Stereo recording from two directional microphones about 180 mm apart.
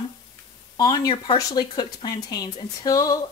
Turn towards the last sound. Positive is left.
turn(degrees=20)  # may be behind; listen again after turning